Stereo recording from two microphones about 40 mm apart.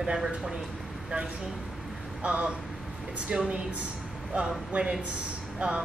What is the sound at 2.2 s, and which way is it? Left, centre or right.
Speech, right.